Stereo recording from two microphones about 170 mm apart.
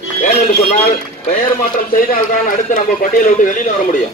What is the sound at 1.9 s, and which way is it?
Speech, 50° left (ahead or behind).